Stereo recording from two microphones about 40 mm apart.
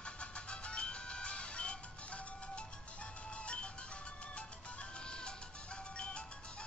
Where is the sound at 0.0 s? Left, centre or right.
Left.